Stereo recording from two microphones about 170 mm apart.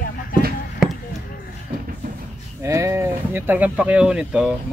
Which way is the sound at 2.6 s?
15° right (ahead or behind).